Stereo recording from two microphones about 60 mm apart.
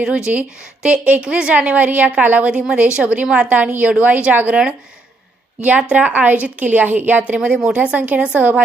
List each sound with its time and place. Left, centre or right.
0.3 s a woman's voice: right
7.3 s a woman's voice: centre